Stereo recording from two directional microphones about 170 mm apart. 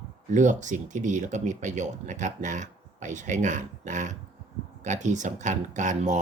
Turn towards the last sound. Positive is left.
turn(degrees=-45)  # may be behind; listen again after turning